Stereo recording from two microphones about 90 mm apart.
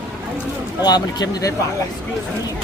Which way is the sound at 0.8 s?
50° left (ahead or behind).